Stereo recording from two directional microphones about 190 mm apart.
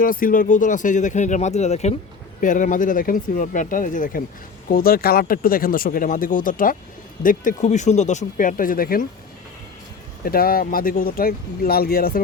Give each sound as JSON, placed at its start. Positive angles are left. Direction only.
{"t": 0.0, "sound": "speech", "side_deg": 45}
{"t": 10.2, "sound": "speech", "side_deg": 50}